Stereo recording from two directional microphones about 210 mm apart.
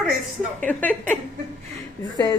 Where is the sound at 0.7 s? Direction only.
10° left (ahead or behind).